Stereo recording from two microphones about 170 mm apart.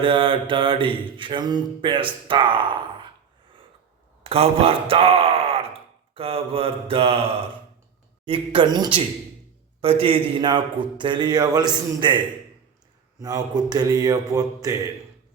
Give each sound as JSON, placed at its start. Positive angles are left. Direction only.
{"t": 0.0, "sound": "a man's voice", "side_deg": -30}
{"t": 4.2, "sound": "speech", "side_deg": -35}
{"t": 6.1, "sound": "mantra", "side_deg": -35}
{"t": 8.2, "sound": "a man's voice", "side_deg": -30}